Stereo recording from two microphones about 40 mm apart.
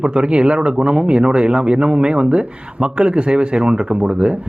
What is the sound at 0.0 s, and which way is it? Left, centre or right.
A man's voice, right.